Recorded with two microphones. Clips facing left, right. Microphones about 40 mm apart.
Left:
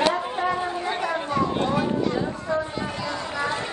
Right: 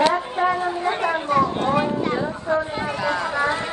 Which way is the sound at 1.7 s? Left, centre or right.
Right.